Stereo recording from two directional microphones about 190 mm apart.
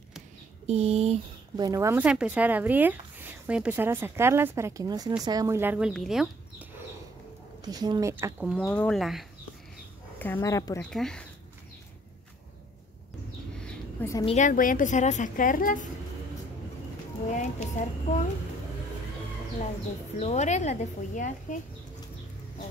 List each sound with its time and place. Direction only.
0.7 s speech: 35° right (ahead or behind)
1.6 s speech: 15° right (ahead or behind)
7.6 s speech: 20° right (ahead or behind)
8.6 s speech: 5° left (ahead or behind)
10.9 s speech: 5° left (ahead or behind)
14.2 s a woman's voice: 40° left (ahead or behind)
17.3 s speech: 40° left (ahead or behind)
20.2 s speech: 35° left (ahead or behind)